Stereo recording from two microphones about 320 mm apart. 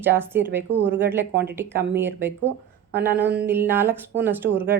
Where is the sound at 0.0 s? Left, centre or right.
Centre.